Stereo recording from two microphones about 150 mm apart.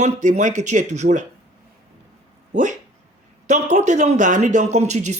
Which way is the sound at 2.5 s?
55° right (ahead or behind).